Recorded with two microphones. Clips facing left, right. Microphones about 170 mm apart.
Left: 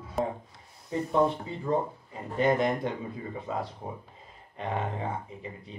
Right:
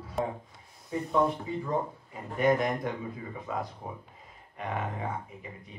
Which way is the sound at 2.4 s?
30° left (ahead or behind).